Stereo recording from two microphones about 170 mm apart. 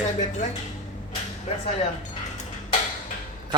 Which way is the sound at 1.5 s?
40° left (ahead or behind).